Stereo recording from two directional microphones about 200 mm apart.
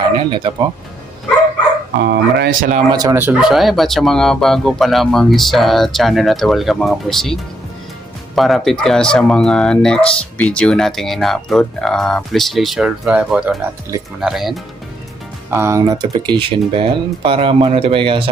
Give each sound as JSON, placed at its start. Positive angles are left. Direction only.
{"t": 0.2, "sound": "speech", "side_deg": -25}
{"t": 2.0, "sound": "speech", "side_deg": -55}
{"t": 2.9, "sound": "speech", "side_deg": -20}
{"t": 8.4, "sound": "speech", "side_deg": 0}
{"t": 15.4, "sound": "speech", "side_deg": -10}